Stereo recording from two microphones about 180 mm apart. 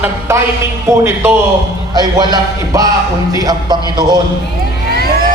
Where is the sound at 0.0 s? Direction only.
15° right (ahead or behind).